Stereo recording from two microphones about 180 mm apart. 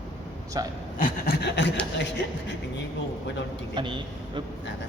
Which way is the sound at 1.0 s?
60° left (ahead or behind).